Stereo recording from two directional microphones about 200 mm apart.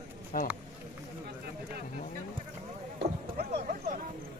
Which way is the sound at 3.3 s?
35° right (ahead or behind).